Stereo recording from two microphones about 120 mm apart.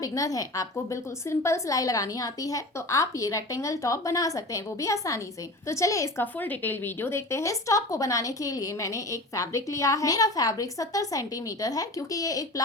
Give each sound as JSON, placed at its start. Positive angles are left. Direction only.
{"t": 0.0, "sound": "a woman's voice", "side_deg": 30}
{"t": 6.4, "sound": "a woman's voice", "side_deg": 15}